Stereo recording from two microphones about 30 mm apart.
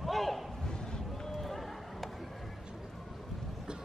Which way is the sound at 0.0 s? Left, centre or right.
Centre.